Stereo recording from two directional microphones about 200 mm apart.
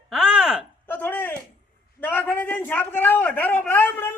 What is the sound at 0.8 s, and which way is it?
A man's voice, 10° left (ahead or behind).